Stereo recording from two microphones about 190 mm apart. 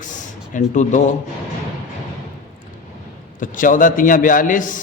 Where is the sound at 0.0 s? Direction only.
40° left (ahead or behind).